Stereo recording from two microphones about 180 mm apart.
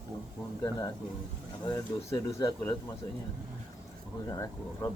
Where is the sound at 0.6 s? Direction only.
20° left (ahead or behind).